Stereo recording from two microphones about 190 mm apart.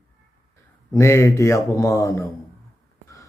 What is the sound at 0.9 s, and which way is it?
A man's voice, 15° left (ahead or behind).